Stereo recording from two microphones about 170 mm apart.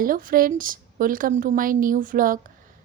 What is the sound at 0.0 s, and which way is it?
A woman's voice, 55° right (ahead or behind).